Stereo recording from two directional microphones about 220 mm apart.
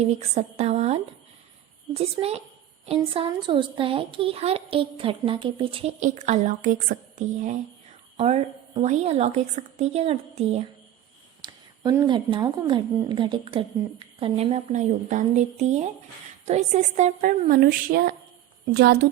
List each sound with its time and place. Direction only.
0.0 s a woman's voice: 30° right (ahead or behind)
11.4 s a woman's voice: 20° right (ahead or behind); by 18.9 s 45° right (ahead or behind)